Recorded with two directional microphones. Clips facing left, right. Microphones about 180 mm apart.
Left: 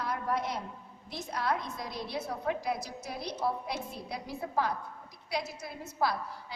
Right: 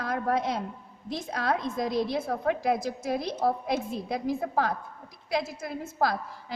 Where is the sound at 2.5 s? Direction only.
90° right.